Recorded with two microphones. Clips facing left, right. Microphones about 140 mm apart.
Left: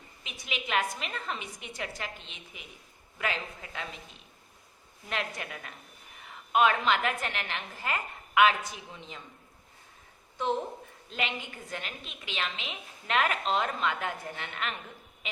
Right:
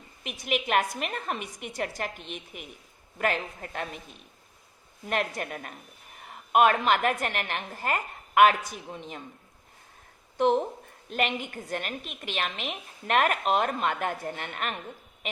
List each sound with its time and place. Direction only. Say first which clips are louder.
0.3 s a woman's voice: right 7 dB; 55° right (ahead or behind)
5.0 s a woman's voice: right 6 dB; 50° right (ahead or behind)
11.1 s a woman's voice: right 6 dB; 55° right (ahead or behind)